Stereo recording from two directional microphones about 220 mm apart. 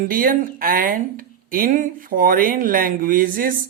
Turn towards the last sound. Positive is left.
turn(degrees=-40)  # may be behind; listen again after turning